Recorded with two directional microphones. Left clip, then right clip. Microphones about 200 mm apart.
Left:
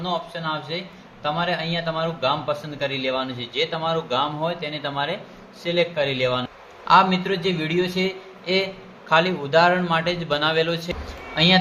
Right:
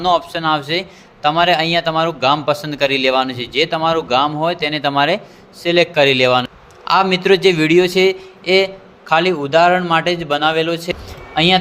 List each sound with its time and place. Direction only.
0.0 s a man's voice: 55° right (ahead or behind)